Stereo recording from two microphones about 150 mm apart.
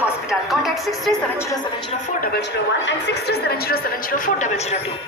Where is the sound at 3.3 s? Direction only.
90° left.